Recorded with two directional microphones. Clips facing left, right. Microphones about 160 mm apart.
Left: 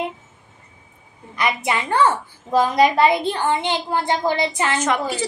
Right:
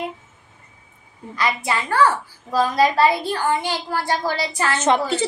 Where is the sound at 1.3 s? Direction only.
20° left (ahead or behind).